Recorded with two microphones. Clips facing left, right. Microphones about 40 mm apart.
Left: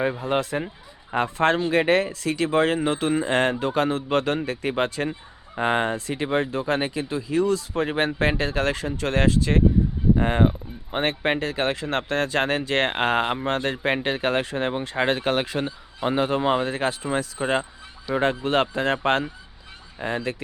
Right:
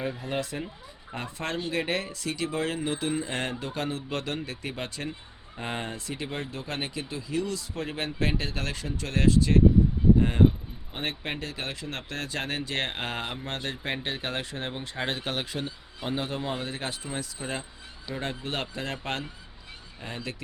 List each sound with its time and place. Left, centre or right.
0.1 s speech: left
14.9 s speech: left
16.0 s speech: left
17.2 s speech: left